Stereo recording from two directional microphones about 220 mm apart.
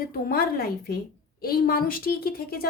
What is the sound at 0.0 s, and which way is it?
A woman's voice, 40° left (ahead or behind).